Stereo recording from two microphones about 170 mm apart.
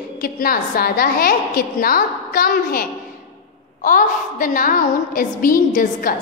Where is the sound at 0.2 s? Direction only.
60° left (ahead or behind).